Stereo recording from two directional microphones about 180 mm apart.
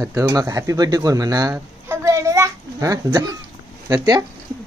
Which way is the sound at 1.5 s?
15° right (ahead or behind).